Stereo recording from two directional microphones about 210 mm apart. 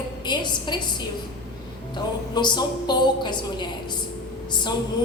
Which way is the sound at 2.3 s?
20° left (ahead or behind).